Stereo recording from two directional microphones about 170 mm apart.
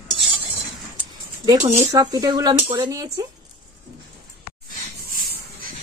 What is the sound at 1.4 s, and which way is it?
Speech, 20° right (ahead or behind).